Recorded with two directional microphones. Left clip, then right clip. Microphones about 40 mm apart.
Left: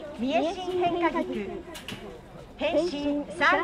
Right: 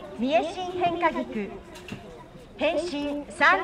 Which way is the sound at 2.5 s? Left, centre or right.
Right.